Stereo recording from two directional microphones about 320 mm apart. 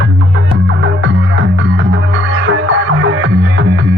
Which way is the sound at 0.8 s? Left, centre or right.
Right.